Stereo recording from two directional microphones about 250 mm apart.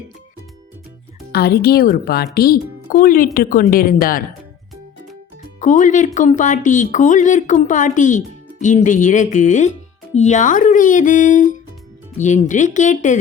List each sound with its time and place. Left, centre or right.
1.3 s speech: left
5.5 s speech: left